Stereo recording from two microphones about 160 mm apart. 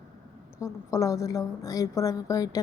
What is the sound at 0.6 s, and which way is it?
A woman's voice, 20° left (ahead or behind).